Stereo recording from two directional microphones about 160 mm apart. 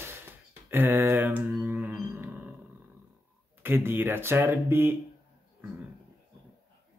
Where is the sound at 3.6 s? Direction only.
15° right (ahead or behind).